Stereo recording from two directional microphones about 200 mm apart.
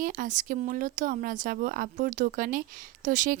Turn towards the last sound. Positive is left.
turn(degrees=-40)  # may be behind; listen again after turning